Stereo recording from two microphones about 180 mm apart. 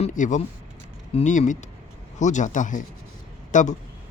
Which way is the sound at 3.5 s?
45° left (ahead or behind).